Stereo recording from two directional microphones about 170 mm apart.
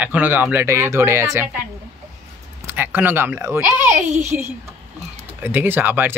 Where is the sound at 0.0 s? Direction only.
10° right (ahead or behind).